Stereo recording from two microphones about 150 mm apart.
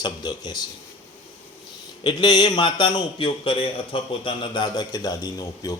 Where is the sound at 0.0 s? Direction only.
30° left (ahead or behind).